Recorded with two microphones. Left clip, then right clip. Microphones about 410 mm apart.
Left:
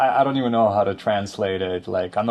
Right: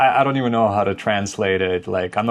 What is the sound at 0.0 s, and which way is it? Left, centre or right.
Speech, centre.